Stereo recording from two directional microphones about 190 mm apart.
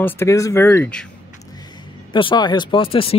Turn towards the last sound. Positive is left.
turn(degrees=30)  # may be behind; listen again after turning